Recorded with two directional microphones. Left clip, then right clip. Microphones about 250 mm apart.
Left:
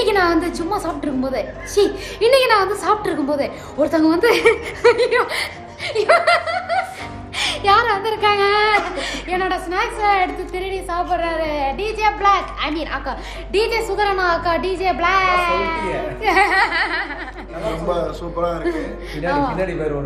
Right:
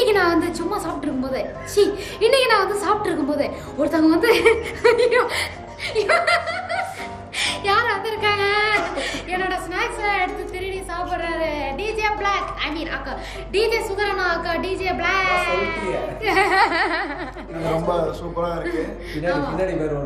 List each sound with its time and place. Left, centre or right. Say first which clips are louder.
0.0 s a woman's voice: left 1 dB; centre
16.4 s a sound: left 1 dB; centre
17.9 s a man's voice: even; centre
19.2 s a woman's voice: left 3 dB; centre